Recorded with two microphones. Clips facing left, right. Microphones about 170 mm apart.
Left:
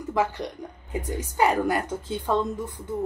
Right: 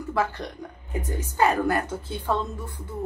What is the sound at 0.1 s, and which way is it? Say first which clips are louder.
A woman's voice: left 2 dB; 15° left (ahead or behind).